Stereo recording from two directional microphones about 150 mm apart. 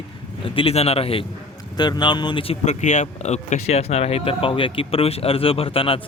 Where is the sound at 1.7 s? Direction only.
30° left (ahead or behind).